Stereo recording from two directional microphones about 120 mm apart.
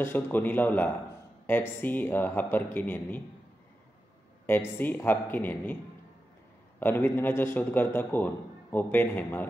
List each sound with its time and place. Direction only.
0.0 s a man's voice: 15° left (ahead or behind)
4.5 s a man's voice: 15° left (ahead or behind)
6.8 s a man's voice: 15° left (ahead or behind)